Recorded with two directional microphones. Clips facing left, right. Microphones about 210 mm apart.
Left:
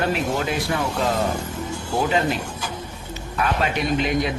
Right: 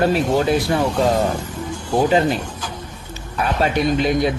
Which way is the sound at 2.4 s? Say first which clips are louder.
Right 1 dB; 10° left (ahead or behind).